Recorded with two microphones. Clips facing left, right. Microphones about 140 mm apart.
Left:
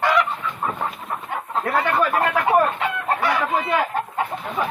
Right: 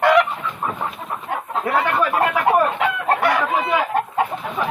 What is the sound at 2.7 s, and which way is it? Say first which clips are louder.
Chicken: right 4 dB; 90° right.